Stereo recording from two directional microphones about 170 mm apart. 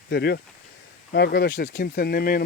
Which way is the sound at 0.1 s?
70° left (ahead or behind).